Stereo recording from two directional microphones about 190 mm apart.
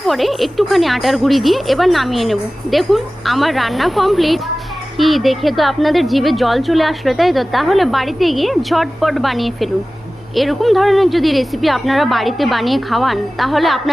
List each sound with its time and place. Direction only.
0.1 s a woman's voice: centre (ahead or behind)